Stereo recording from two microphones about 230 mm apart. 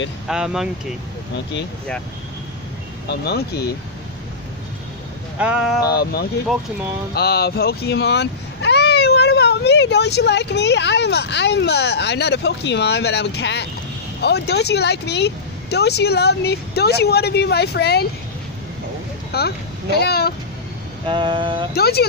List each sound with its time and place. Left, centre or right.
0.3 s speech: centre
3.1 s speech: left
5.4 s speech: centre
5.9 s speech: left
19.3 s speech: left
21.0 s a sound: right
21.7 s speech: left